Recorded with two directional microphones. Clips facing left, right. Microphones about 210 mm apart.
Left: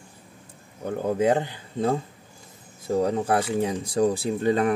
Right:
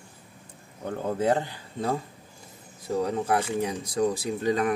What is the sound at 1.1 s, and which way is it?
Speech, 20° left (ahead or behind).